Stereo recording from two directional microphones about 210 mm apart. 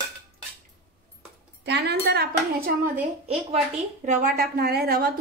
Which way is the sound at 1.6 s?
55° right (ahead or behind).